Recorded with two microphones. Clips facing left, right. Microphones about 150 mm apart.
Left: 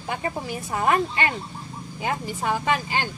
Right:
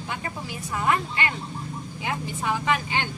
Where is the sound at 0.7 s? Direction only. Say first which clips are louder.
Left 3 dB; 45° left (ahead or behind).